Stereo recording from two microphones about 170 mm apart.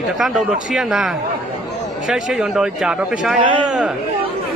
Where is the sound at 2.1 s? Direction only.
5° right (ahead or behind).